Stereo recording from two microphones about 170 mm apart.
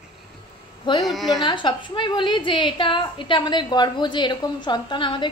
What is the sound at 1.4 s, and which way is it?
A woman's voice, 30° left (ahead or behind).